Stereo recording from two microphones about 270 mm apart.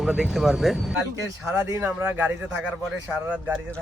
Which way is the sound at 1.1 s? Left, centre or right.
Centre.